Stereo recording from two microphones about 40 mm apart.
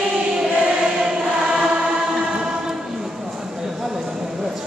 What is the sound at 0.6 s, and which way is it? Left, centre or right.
Choir, centre.